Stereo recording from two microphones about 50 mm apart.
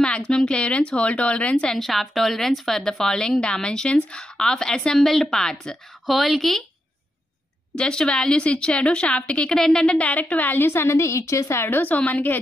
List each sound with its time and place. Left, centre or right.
0.0 s a woman's voice: centre
1.7 s a woman's voice: centre
6.0 s a woman's voice: centre
7.7 s speech: centre; by 10.7 s left
10.7 s a woman's voice: left
11.7 s a woman's voice: left